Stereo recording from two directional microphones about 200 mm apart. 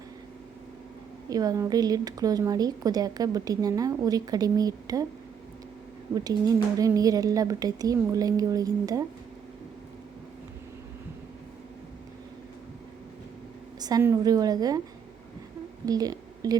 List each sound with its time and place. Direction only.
1.3 s a woman's voice: 20° right (ahead or behind)
6.1 s a woman's voice: 20° right (ahead or behind)
13.7 s a woman's voice: 20° right (ahead or behind)
15.9 s speech: 20° right (ahead or behind)